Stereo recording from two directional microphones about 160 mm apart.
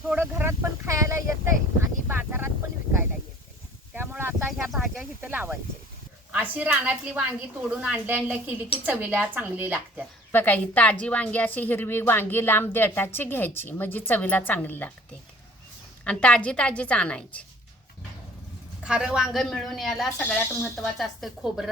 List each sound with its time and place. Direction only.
0.1 s a sound: 10° right (ahead or behind)
3.9 s a sound: 15° right (ahead or behind)
4.5 s snake: centre (ahead or behind)
6.3 s a woman's voice: 10° right (ahead or behind)
10.3 s speech: 10° left (ahead or behind)
16.0 s speech: 5° left (ahead or behind)
18.8 s a woman's voice: 5° right (ahead or behind)